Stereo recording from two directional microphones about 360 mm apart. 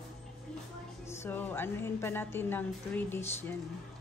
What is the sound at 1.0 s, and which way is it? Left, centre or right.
A woman's voice, centre.